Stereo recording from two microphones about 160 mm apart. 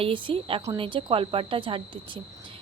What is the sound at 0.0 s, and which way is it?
A woman's voice, 30° right (ahead or behind).